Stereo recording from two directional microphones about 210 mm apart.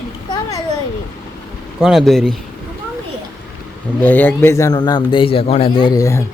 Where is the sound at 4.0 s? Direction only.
10° left (ahead or behind).